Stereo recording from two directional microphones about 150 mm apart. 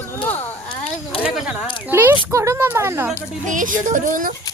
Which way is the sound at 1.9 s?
15° right (ahead or behind).